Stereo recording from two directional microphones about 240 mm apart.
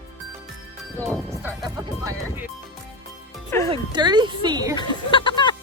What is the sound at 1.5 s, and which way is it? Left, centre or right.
Speech, centre.